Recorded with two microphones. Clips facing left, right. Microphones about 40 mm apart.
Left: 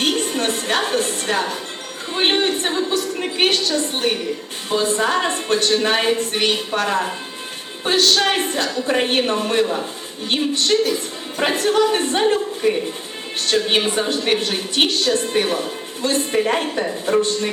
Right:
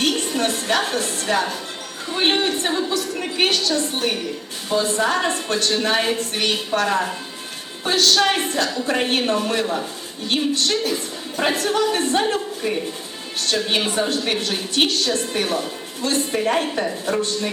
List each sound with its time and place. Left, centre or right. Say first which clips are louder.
0.0 s a woman's voice: left 1 dB; left
13.4 s a woman's voice: left 3 dB; left
16.3 s a woman's voice: left 1 dB; left
16.6 s a woman's voice: left 1 dB; centre
17.1 s a woman's voice: left 7 dB; left